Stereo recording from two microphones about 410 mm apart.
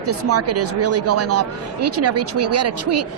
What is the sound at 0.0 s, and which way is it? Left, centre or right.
Speech, right.